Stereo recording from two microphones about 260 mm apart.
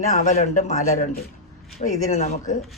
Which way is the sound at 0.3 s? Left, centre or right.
Left.